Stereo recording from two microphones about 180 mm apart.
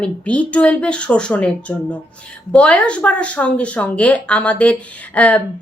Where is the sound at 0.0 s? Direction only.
5° left (ahead or behind).